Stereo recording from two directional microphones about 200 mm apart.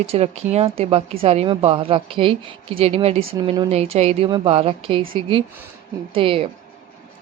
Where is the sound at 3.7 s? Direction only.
30° right (ahead or behind).